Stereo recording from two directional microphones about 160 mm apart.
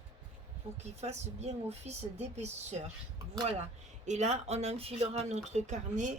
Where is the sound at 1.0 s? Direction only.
40° right (ahead or behind).